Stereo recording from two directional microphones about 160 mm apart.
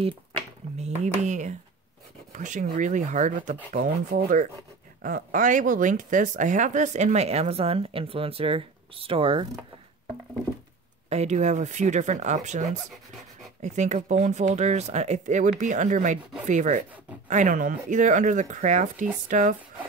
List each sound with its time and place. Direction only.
0.7 s speech: 45° right (ahead or behind)
11.1 s speech: 45° right (ahead or behind)